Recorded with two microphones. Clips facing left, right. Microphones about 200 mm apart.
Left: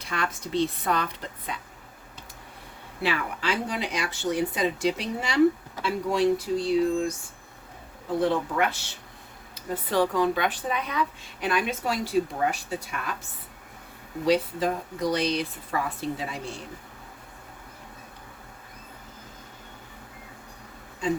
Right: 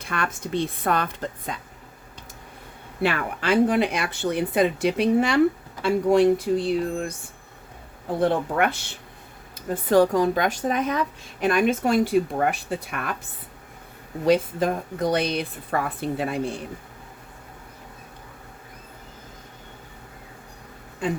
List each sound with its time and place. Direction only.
0.0 s speech: 55° right (ahead or behind)
3.0 s speech: 55° right (ahead or behind)
8.2 s speech: 55° right (ahead or behind)
9.9 s speech: 45° right (ahead or behind)
14.3 s speech: 50° right (ahead or behind)